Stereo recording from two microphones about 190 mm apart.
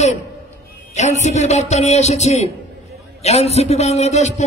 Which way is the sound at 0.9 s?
35° left (ahead or behind).